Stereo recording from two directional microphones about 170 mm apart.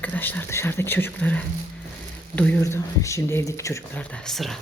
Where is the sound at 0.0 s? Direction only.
10° left (ahead or behind).